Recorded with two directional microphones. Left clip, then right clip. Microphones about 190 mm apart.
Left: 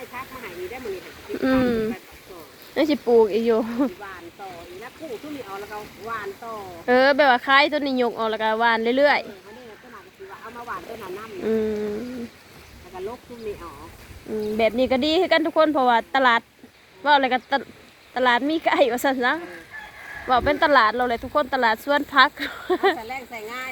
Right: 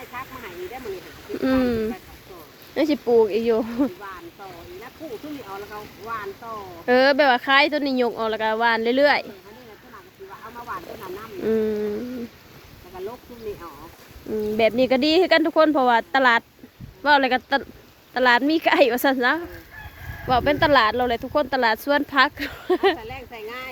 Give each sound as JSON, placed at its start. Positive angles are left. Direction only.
{"t": 1.4, "sound": "speech", "side_deg": -15}
{"t": 5.0, "sound": "a sound", "side_deg": -25}
{"t": 5.7, "sound": "boat", "side_deg": -45}
{"t": 6.8, "sound": "speech", "side_deg": -20}
{"t": 11.0, "sound": "a sound", "side_deg": -30}
{"t": 14.5, "sound": "speech", "side_deg": -35}
{"t": 23.0, "sound": "speech", "side_deg": 50}